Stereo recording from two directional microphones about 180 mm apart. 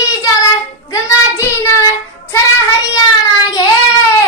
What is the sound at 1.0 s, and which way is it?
Child singing, 15° left (ahead or behind).